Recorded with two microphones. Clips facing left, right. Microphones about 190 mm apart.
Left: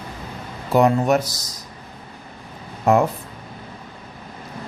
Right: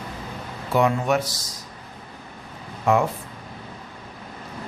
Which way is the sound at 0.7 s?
40° left (ahead or behind).